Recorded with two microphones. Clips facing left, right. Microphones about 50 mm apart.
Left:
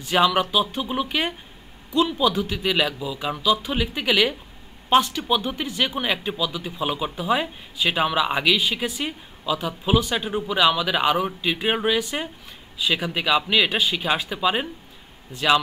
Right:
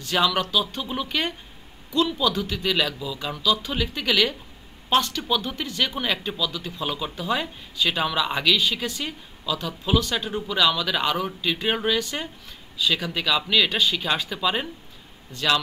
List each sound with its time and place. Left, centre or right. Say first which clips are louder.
0.0 s speech: left 3 dB; centre